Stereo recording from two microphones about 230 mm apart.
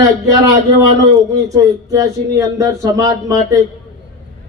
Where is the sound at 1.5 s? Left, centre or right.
Centre.